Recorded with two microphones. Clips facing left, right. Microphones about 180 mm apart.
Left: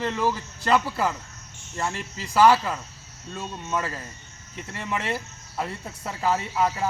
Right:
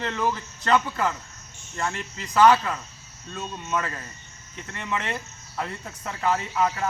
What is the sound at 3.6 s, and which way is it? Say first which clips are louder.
Speech: even; 25° left (ahead or behind).